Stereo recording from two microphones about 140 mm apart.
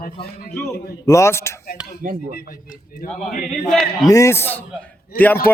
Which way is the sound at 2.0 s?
75° right (ahead or behind).